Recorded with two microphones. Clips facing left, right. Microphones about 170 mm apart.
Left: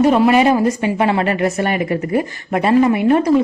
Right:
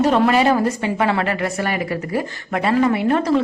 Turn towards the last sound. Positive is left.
turn(degrees=15)  # may be behind; listen again after turning